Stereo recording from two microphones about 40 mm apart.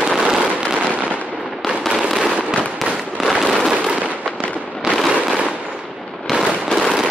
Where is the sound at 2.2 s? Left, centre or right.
Centre.